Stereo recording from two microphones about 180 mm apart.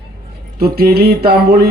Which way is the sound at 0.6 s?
60° right (ahead or behind).